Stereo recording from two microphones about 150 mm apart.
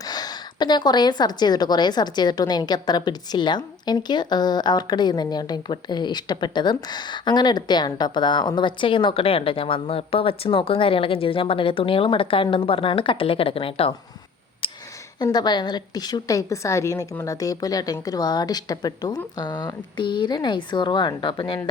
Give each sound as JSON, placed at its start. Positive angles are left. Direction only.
{"t": 0.0, "sound": "a woman's voice", "side_deg": 25}
{"t": 14.6, "sound": "a sound", "side_deg": 35}
{"t": 15.2, "sound": "a woman's voice", "side_deg": 30}